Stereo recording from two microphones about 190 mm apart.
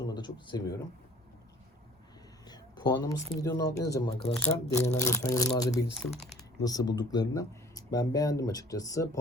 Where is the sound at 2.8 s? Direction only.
20° left (ahead or behind).